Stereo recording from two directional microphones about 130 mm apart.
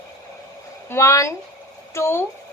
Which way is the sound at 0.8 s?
20° left (ahead or behind).